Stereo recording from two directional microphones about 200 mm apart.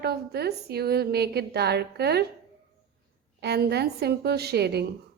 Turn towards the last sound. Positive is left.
turn(degrees=-55)  # may be behind; listen again after turning